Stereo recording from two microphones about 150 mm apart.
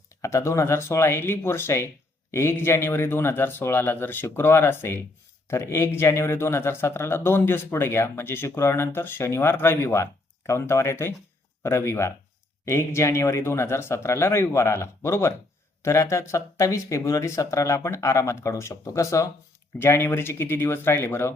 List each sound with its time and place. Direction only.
0.1 s speech: 20° left (ahead or behind)